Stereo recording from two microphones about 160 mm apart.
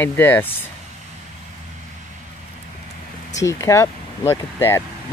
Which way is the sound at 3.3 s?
20° left (ahead or behind).